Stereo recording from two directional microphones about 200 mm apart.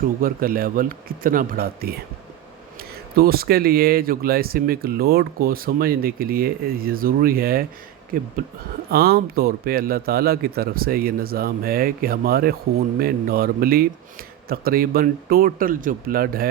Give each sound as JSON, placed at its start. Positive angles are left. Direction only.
{"t": 0.2, "sound": "speech", "side_deg": -45}